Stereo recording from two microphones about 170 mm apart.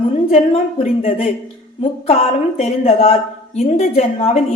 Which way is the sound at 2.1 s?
40° left (ahead or behind).